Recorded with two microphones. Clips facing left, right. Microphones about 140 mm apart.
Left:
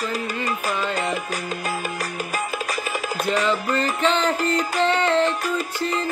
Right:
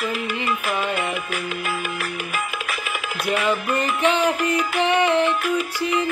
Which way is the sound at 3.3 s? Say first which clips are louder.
Right 1 dB; 10° right (ahead or behind).